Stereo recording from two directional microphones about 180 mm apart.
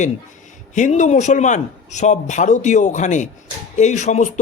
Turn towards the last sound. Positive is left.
turn(degrees=40)  # may be behind; listen again after turning